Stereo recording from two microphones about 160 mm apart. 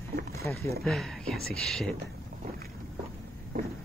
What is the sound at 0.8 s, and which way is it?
Speech, centre (ahead or behind).